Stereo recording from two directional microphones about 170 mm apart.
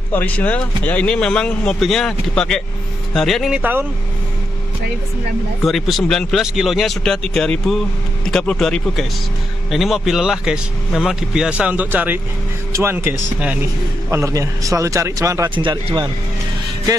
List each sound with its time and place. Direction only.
0.1 s speech: 10° left (ahead or behind); by 3.8 s 10° right (ahead or behind)
5.7 s a man's voice: centre (ahead or behind); by 16.1 s 25° right (ahead or behind)